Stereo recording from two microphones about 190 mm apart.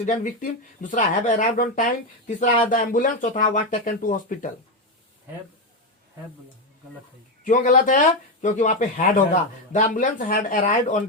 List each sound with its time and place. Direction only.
0.0 s speech: 40° left (ahead or behind)
7.4 s speech: 45° left (ahead or behind)